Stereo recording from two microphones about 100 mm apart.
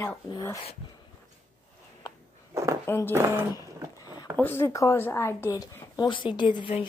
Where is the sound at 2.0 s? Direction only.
40° left (ahead or behind).